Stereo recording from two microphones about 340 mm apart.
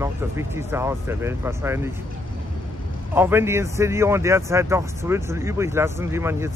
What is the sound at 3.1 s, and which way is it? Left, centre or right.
Speech, centre.